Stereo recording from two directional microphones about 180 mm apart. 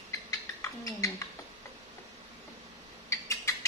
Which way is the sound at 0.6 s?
15° left (ahead or behind).